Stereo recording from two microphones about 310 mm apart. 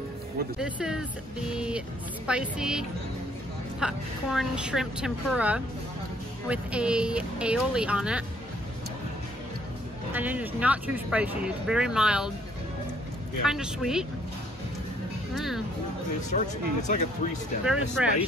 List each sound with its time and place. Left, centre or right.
0.6 s speech: centre
10.1 s speech: centre
13.4 s speech: centre
15.3 s speech: centre
16.3 s speech: left
17.6 s speech: centre